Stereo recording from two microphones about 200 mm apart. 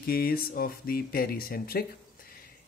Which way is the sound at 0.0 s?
50° left (ahead or behind).